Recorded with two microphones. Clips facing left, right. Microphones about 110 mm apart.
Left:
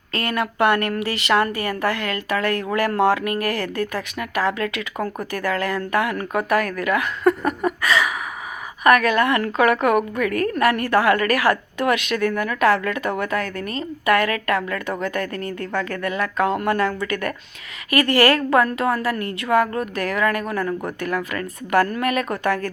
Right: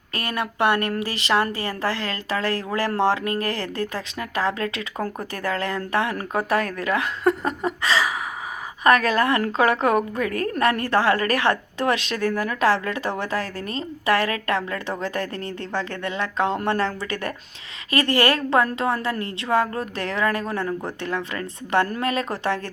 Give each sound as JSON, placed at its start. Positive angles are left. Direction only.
{"t": 0.1, "sound": "a woman's voice", "side_deg": -25}